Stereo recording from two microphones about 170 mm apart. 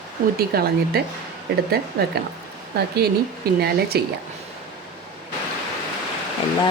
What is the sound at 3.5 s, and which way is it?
Speech, 65° right (ahead or behind).